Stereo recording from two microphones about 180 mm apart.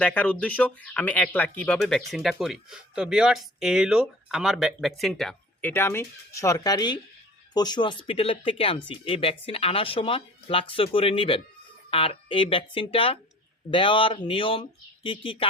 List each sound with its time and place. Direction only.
0.0 s speech: 5° left (ahead or behind)
5.7 s speech: 10° left (ahead or behind); by 15.4 s 30° left (ahead or behind)